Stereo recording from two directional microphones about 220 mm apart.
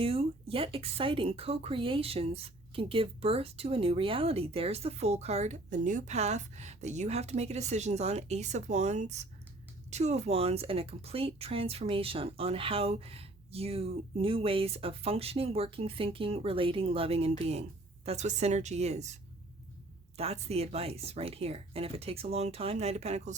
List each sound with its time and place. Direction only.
0.0 s speech: 25° right (ahead or behind)
20.1 s speech: 30° right (ahead or behind)